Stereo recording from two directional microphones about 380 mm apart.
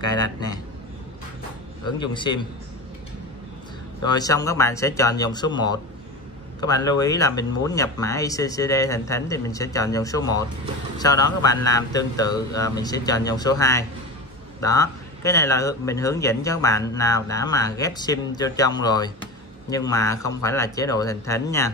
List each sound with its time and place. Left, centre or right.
0.1 s speech: centre
2.0 s speech: centre
4.0 s speech: centre